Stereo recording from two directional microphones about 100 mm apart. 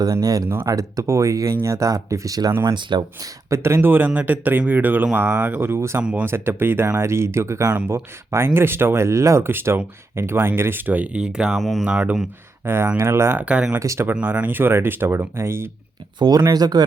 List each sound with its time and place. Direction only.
0.0 s speech: 40° right (ahead or behind)
6.0 s speech: 10° right (ahead or behind)
6.2 s speech: 25° right (ahead or behind); by 11.9 s centre (ahead or behind)
11.9 s speech: 10° right (ahead or behind)
12.6 s speech: 25° right (ahead or behind)
13.4 s speech: 10° right (ahead or behind)
13.7 s speech: 30° right (ahead or behind)
14.1 s speech: 15° right (ahead or behind)
16.1 s speech: 45° right (ahead or behind)